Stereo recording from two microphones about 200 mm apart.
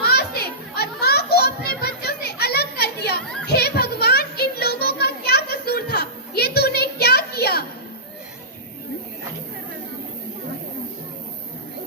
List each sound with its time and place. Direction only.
0.0 s children playing: 55° left (ahead or behind)